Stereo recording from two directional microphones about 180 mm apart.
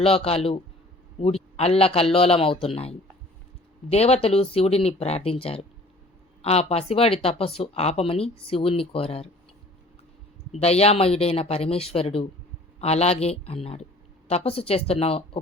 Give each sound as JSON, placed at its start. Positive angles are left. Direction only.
{"t": 0.0, "sound": "speech", "side_deg": 30}
{"t": 10.5, "sound": "speech", "side_deg": 35}